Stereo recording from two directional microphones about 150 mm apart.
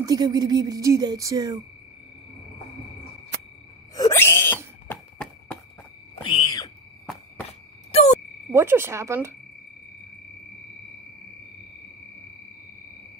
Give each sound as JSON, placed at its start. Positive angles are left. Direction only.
{"t": 0.0, "sound": "speech", "side_deg": -25}
{"t": 3.9, "sound": "sneeze", "side_deg": 20}
{"t": 4.8, "sound": "a sound", "side_deg": 5}
{"t": 6.3, "sound": "a sound", "side_deg": 30}
{"t": 7.9, "sound": "frog", "side_deg": 45}
{"t": 8.5, "sound": "speech", "side_deg": -15}